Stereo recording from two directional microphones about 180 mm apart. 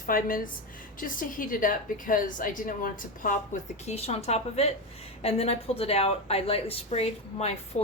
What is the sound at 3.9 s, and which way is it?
A woman's voice, 35° left (ahead or behind).